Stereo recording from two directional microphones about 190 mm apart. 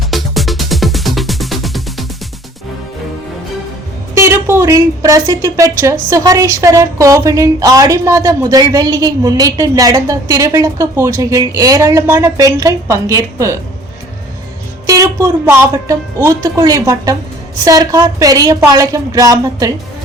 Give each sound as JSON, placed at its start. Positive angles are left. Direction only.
{"t": 0.1, "sound": "music", "side_deg": 0}
{"t": 4.1, "sound": "a woman's voice", "side_deg": -15}
{"t": 14.8, "sound": "a woman's voice", "side_deg": -15}